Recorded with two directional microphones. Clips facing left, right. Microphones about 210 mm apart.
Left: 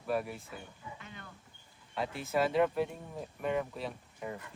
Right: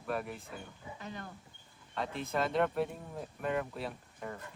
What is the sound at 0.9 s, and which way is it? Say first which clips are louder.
Speech: right 6 dB; 40° right (ahead or behind).